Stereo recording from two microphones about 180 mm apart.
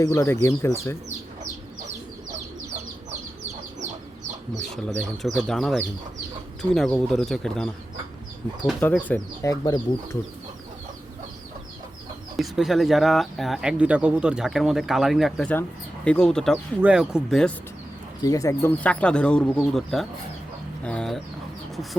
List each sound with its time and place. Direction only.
0.0 s speech: 15° left (ahead or behind)
2.7 s chicken: 40° right (ahead or behind)
4.7 s speech: centre (ahead or behind)
8.8 s speech: 10° left (ahead or behind)
12.4 s speech: centre (ahead or behind)
18.2 s speech: 20° left (ahead or behind)